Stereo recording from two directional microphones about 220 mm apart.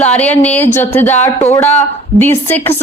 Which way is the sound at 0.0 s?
5° left (ahead or behind).